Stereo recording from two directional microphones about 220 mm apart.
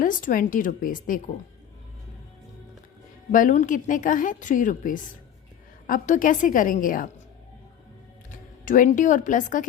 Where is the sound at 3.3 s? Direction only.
35° left (ahead or behind).